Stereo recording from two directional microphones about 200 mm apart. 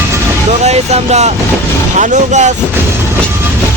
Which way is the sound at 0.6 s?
35° right (ahead or behind).